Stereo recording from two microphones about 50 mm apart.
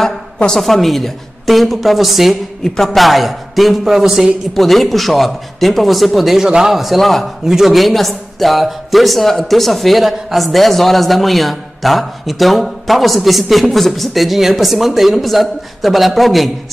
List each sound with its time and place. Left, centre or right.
0.5 s speech: centre
2.6 s speech: centre